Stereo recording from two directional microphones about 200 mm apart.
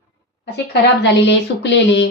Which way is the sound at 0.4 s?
55° left (ahead or behind).